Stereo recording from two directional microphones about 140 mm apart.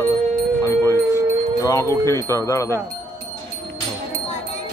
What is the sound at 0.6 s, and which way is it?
Music, 20° left (ahead or behind).